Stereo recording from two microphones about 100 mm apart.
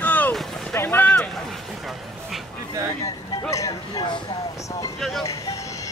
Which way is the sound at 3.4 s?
35° left (ahead or behind).